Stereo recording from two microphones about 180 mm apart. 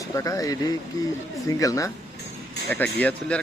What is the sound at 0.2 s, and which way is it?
Speech, 20° left (ahead or behind).